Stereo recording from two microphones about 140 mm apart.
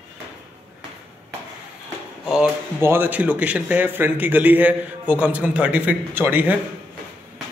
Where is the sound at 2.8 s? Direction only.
15° right (ahead or behind).